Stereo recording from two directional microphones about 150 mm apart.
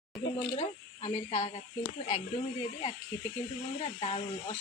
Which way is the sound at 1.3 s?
45° left (ahead or behind).